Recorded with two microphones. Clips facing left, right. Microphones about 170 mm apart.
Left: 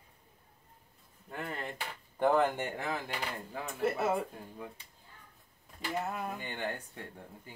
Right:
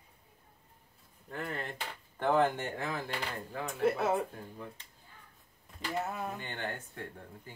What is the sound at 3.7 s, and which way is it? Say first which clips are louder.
Speech: right 2 dB; centre (ahead or behind).